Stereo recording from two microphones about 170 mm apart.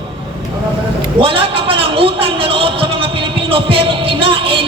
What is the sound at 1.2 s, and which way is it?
A man's voice, 30° right (ahead or behind).